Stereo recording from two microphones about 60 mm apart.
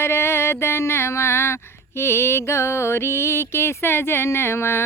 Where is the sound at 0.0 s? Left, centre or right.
Left.